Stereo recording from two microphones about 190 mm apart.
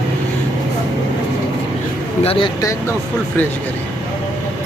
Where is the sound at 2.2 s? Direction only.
25° left (ahead or behind).